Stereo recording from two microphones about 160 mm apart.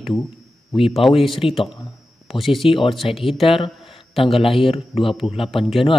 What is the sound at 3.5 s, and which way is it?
Speech, 35° left (ahead or behind).